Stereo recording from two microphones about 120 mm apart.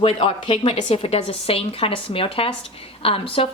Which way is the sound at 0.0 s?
50° left (ahead or behind).